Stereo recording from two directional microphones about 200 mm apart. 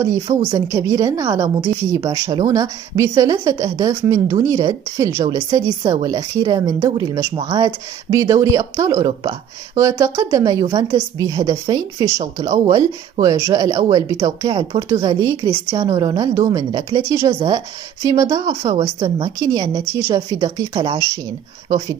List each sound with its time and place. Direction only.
0.0 s a woman's voice: 15° right (ahead or behind)